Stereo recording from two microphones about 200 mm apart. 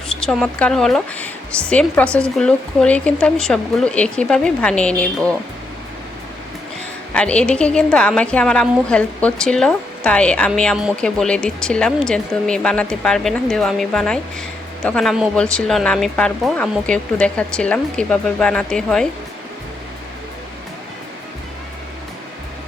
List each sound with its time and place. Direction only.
0.1 s a woman's voice: 5° left (ahead or behind)
7.1 s a woman's voice: 5° left (ahead or behind)